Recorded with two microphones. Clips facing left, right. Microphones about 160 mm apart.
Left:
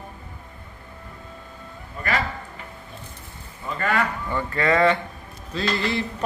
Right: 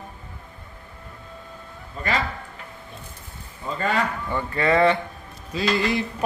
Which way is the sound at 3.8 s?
20° right (ahead or behind).